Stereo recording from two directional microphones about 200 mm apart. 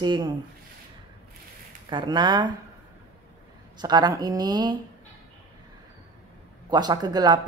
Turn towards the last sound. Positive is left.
turn(degrees=-20)  # may be behind; listen again after turning